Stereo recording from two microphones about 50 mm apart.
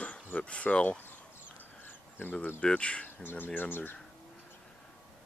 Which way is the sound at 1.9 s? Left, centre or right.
Left.